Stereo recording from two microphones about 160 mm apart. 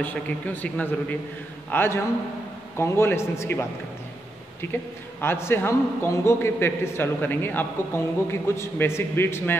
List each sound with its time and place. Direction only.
0.0 s a man's voice: 10° left (ahead or behind)
5.2 s a man's voice: 15° left (ahead or behind)